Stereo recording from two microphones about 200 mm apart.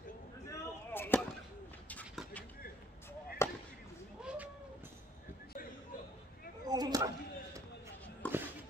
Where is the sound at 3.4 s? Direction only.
15° left (ahead or behind).